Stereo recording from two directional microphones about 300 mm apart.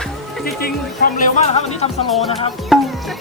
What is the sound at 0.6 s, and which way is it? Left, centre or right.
Speech, left.